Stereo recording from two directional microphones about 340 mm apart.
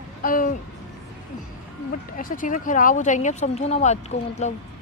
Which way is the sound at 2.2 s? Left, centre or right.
Left.